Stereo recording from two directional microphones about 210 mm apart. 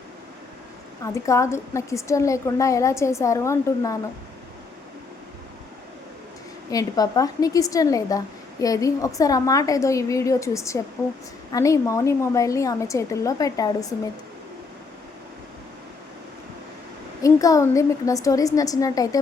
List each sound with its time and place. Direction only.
1.1 s a woman's voice: 15° left (ahead or behind)
6.7 s a woman's voice: 15° left (ahead or behind)
17.2 s a woman's voice: 15° left (ahead or behind)